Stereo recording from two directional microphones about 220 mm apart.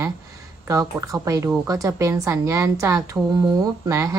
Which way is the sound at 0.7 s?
15° right (ahead or behind).